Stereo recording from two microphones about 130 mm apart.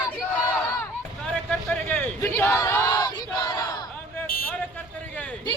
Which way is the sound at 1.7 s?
15° left (ahead or behind).